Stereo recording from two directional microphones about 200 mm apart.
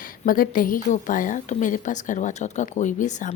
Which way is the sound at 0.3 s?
45° left (ahead or behind).